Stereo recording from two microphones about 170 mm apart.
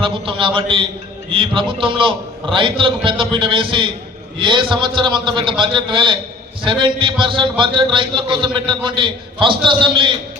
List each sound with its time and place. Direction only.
0.0 s a man's voice: 30° right (ahead or behind)